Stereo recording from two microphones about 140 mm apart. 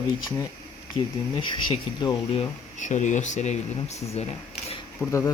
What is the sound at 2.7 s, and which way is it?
Speech, 60° left (ahead or behind).